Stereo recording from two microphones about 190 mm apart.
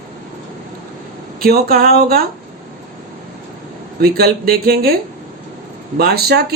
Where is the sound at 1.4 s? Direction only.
55° right (ahead or behind).